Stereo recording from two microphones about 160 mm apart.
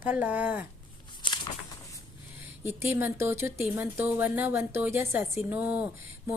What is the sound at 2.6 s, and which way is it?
A woman's voice, 15° right (ahead or behind).